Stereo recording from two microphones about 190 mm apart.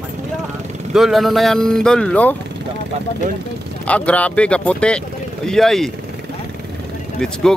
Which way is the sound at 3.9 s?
5° left (ahead or behind).